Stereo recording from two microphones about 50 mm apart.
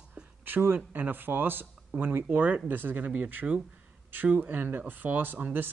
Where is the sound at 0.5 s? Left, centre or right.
Right.